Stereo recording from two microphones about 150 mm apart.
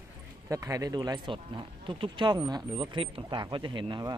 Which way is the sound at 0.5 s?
20° right (ahead or behind).